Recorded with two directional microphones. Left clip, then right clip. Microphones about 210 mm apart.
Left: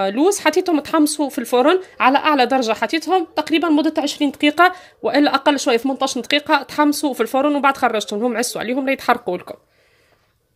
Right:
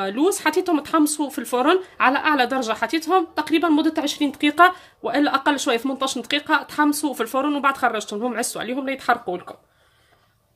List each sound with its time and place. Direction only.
0.0 s speech: 30° left (ahead or behind)